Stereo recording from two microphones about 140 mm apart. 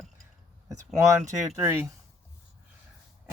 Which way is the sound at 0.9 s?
20° right (ahead or behind).